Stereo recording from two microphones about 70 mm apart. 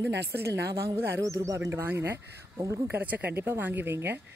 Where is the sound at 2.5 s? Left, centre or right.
Right.